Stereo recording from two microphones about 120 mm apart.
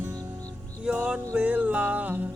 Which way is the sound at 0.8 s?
10° right (ahead or behind).